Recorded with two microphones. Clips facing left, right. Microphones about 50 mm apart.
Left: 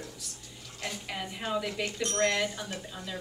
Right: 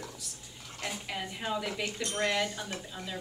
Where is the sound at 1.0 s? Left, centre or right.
Centre.